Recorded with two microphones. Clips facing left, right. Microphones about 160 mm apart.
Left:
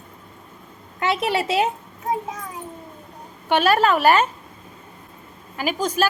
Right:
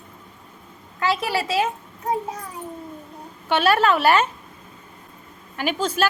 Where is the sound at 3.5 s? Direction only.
45° left (ahead or behind).